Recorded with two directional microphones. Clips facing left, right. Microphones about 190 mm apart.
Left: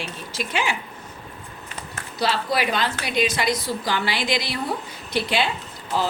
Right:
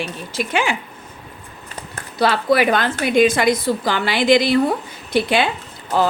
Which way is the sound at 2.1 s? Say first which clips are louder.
Right 7 dB; 55° right (ahead or behind).